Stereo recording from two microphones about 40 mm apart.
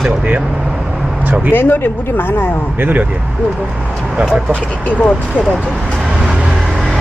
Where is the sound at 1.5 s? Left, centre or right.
Left.